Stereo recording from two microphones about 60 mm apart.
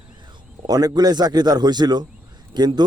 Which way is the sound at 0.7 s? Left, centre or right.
Right.